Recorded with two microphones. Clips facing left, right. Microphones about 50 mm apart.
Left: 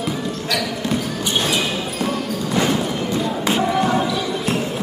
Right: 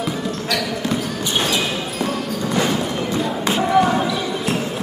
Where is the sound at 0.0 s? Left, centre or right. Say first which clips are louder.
Right 1 dB; centre.